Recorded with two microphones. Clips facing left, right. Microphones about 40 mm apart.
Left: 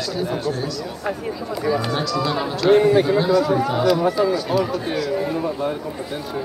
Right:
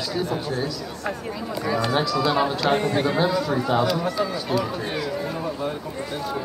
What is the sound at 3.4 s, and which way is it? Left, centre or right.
Speech, centre.